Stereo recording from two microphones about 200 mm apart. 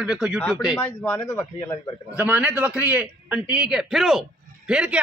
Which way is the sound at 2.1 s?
5° right (ahead or behind).